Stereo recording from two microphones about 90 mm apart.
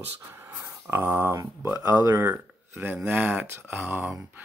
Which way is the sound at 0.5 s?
30° right (ahead or behind).